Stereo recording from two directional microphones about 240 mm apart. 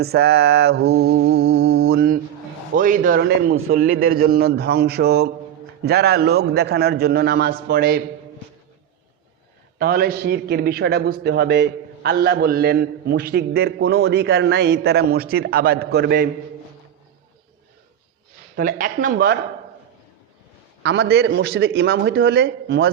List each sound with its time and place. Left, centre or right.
0.0 s a man's voice: right
2.7 s a man's voice: right
9.7 s a man's voice: right
18.5 s a man's voice: right
20.8 s a man's voice: right